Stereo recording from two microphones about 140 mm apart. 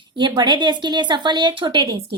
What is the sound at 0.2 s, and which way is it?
A woman's voice, 30° right (ahead or behind).